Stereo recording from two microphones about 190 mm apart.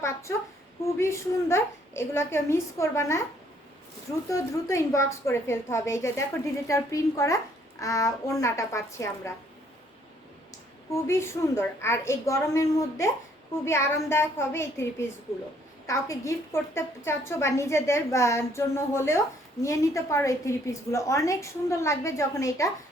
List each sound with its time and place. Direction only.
0.0 s a sound: 15° left (ahead or behind)
0.9 s a woman's voice: 15° left (ahead or behind)
4.3 s a woman's voice: 15° left (ahead or behind)
10.9 s a woman's voice: 15° left (ahead or behind)